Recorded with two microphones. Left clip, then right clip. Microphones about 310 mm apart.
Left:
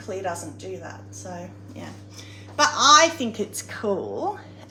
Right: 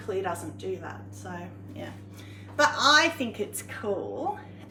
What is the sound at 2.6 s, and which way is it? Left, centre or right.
A woman's voice, centre.